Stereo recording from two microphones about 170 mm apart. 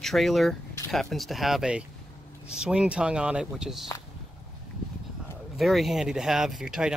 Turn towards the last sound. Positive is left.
turn(degrees=-5)  # may be behind; listen again after turning